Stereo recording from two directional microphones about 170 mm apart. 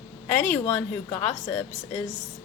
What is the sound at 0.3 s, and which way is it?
Speech, 10° left (ahead or behind).